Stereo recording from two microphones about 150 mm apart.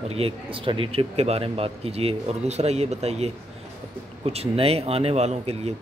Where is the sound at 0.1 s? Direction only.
40° right (ahead or behind).